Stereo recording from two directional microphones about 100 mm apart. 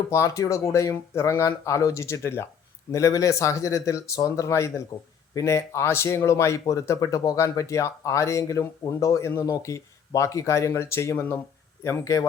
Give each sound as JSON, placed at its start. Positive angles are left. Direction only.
{"t": 0.1, "sound": "speech", "side_deg": 30}
{"t": 4.9, "sound": "speech", "side_deg": 45}
{"t": 5.3, "sound": "speech", "side_deg": 30}